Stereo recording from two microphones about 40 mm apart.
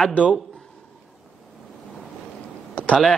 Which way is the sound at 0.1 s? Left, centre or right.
Left.